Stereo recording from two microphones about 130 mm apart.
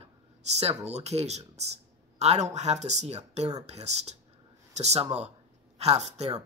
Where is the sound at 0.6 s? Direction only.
55° right (ahead or behind).